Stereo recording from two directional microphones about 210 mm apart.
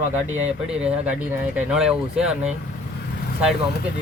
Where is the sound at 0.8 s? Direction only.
5° right (ahead or behind).